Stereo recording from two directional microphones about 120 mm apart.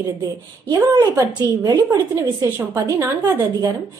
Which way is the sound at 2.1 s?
20° right (ahead or behind).